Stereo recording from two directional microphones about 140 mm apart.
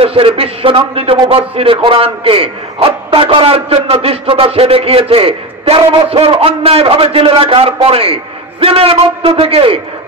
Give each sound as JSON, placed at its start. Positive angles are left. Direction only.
{"t": 0.0, "sound": "a man's voice", "side_deg": -45}